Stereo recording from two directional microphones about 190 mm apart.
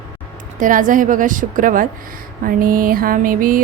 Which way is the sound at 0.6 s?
45° right (ahead or behind).